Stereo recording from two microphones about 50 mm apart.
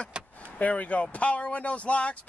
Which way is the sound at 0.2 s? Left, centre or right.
Right.